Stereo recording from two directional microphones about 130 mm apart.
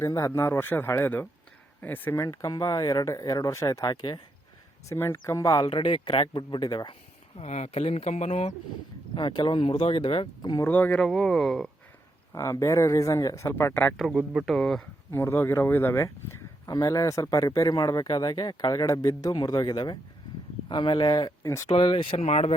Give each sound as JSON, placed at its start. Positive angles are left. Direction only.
{"t": 0.0, "sound": "speech", "side_deg": 25}
{"t": 4.9, "sound": "speech", "side_deg": 20}
{"t": 5.6, "sound": "speech", "side_deg": 40}
{"t": 7.3, "sound": "speech", "side_deg": 60}
{"t": 9.1, "sound": "speech", "side_deg": 35}
{"t": 10.6, "sound": "speech", "side_deg": 15}
{"t": 11.0, "sound": "speech", "side_deg": 5}
{"t": 12.3, "sound": "speech", "side_deg": 25}
{"t": 13.9, "sound": "speech", "side_deg": -5}
{"t": 15.1, "sound": "speech", "side_deg": 20}
{"t": 21.8, "sound": "speech", "side_deg": 40}